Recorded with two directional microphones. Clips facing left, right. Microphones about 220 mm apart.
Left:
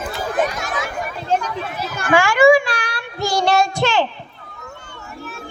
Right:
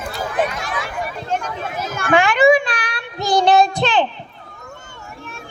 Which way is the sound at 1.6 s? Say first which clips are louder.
Right 1 dB; 45° right (ahead or behind).